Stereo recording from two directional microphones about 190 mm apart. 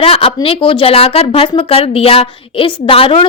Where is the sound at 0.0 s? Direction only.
30° left (ahead or behind).